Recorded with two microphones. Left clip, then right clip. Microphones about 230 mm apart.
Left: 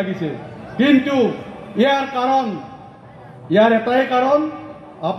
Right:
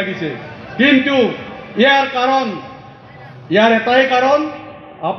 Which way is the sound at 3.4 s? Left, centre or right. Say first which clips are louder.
Right 2 dB; left.